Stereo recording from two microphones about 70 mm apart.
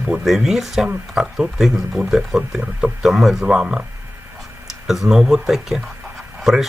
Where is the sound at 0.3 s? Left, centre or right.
Centre.